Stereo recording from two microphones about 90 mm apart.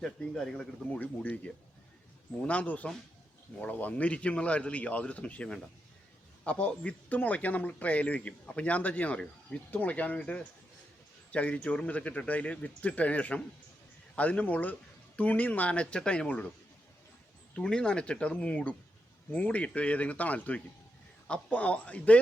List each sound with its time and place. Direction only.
0.0 s speech: 5° left (ahead or behind)
0.9 s speech: 15° left (ahead or behind)
2.4 s speech: 15° left (ahead or behind)
17.5 s speech: 10° left (ahead or behind)